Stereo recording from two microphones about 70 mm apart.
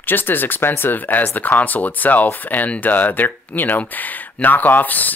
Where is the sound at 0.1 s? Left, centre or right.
Left.